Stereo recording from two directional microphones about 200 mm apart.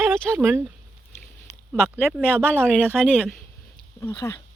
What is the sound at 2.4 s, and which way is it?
Speech, 10° right (ahead or behind).